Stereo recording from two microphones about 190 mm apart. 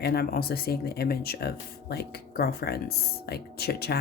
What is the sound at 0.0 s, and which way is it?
A woman's voice, 55° left (ahead or behind).